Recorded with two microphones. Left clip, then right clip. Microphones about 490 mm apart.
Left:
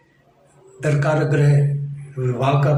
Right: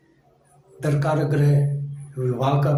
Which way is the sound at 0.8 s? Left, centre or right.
Right.